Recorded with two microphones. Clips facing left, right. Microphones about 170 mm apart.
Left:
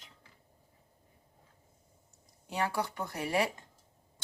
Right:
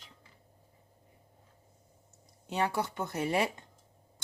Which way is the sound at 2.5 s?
20° right (ahead or behind).